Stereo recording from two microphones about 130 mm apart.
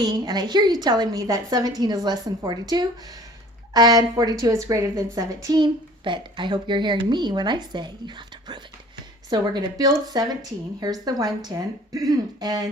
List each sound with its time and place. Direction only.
0.0 s a woman's voice: 35° right (ahead or behind)